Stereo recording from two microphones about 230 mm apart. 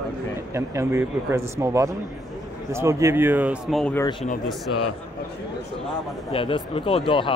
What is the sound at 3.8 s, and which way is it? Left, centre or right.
Speech, centre.